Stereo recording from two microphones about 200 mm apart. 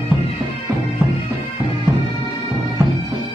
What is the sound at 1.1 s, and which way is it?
Bagpipes, 25° left (ahead or behind).